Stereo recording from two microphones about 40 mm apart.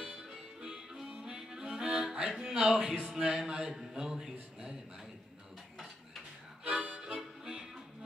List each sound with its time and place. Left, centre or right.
0.0 s music: centre
2.7 s speech: centre
6.6 s harmonica: right